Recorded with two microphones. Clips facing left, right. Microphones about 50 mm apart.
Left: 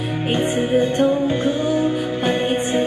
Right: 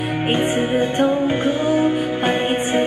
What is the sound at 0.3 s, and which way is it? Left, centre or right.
Music, right.